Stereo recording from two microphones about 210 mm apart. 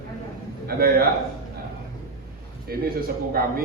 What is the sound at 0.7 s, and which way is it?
Speech, 45° right (ahead or behind).